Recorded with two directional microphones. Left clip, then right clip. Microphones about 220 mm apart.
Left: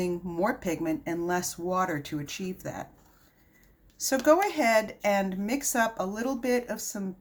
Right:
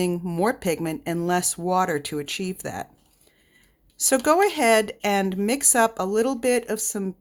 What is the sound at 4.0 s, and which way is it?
Speech, 55° right (ahead or behind).